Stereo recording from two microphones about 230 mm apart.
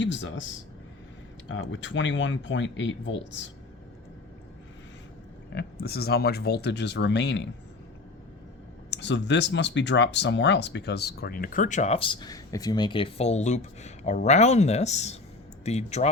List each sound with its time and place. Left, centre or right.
0.0 s speech: left
1.5 s speech: left
5.5 s speech: left
8.9 s speech: left